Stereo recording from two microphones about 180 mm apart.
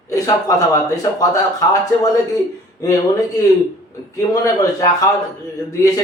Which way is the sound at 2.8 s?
20° left (ahead or behind).